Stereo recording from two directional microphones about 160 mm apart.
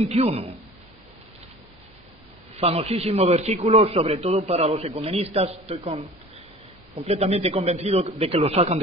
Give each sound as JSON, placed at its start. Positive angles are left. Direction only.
{"t": 0.0, "sound": "a man's voice", "side_deg": -40}
{"t": 2.6, "sound": "a man's voice", "side_deg": -40}